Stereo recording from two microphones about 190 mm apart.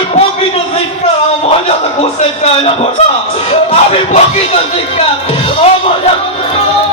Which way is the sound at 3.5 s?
30° left (ahead or behind).